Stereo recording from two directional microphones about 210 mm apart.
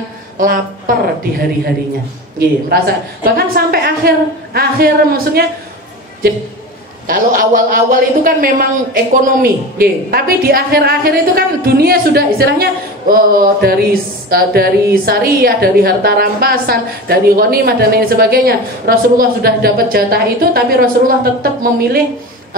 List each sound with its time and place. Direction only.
0.4 s a woman's voice: 40° right (ahead or behind)
2.7 s a woman's voice: 45° right (ahead or behind)
3.3 s a sound: 45° right (ahead or behind)
4.6 s a woman's voice: 45° right (ahead or behind)
7.1 s a woman's voice: 40° right (ahead or behind)